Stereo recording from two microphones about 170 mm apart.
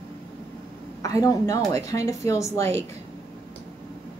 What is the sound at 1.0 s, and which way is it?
Speech, 20° left (ahead or behind).